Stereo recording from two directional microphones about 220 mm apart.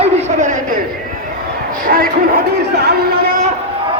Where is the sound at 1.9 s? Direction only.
40° right (ahead or behind).